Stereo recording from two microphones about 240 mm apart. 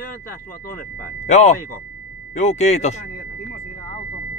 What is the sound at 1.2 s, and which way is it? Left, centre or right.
Speech, left.